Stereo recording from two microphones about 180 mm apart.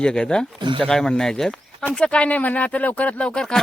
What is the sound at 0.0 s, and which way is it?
Speech, 5° left (ahead or behind).